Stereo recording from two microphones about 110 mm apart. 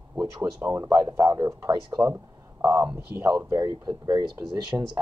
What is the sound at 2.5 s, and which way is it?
Speech, 25° right (ahead or behind).